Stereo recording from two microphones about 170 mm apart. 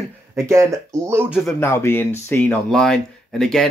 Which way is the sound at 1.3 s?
15° left (ahead or behind).